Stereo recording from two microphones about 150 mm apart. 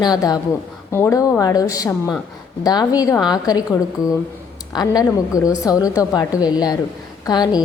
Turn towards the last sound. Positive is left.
turn(degrees=25)  # may be behind; listen again after turning